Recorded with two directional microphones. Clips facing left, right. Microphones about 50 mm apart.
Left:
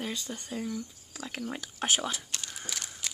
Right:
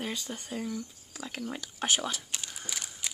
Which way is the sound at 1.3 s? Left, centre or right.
Centre.